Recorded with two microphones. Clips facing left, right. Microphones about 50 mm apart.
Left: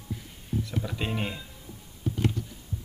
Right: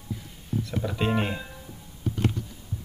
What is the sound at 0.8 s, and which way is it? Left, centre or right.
Speech, centre.